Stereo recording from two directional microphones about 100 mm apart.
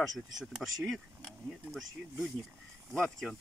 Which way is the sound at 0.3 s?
Centre (ahead or behind).